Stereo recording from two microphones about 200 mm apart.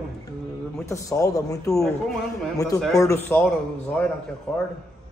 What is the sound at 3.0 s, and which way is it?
A man's voice, 10° left (ahead or behind).